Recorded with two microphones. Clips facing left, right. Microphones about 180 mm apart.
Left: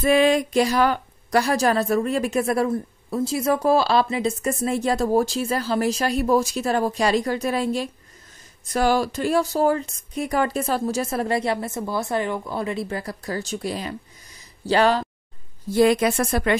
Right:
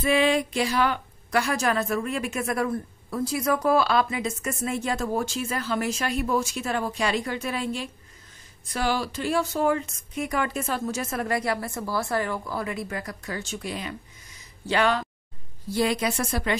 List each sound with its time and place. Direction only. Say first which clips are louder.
0.0 s a woman's voice: left 4 dB; 45° left (ahead or behind)
15.7 s speech: left 7 dB; 55° left (ahead or behind)